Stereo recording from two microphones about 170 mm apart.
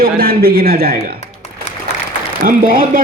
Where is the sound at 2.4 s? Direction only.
55° right (ahead or behind).